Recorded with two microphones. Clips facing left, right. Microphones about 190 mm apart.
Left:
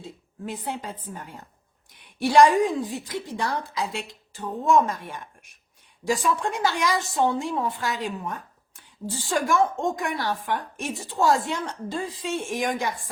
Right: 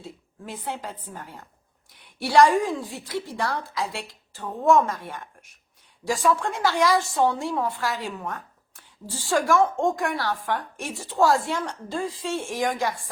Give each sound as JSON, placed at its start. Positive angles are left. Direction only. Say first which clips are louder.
{"t": 0.0, "sound": "a woman's voice", "louder": "left 3 dB", "side_deg": 15}